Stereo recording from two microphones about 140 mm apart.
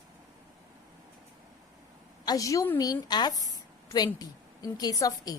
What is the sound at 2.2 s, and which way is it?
A woman's voice, 25° left (ahead or behind).